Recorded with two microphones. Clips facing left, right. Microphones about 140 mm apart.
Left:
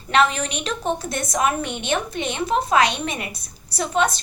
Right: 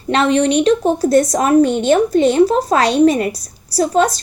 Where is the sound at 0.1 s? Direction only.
35° right (ahead or behind).